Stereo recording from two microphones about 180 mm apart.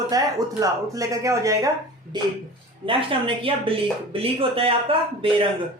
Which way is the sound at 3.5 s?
30° right (ahead or behind).